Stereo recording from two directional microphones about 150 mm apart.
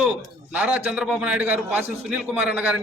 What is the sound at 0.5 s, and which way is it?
A man's voice, 10° right (ahead or behind).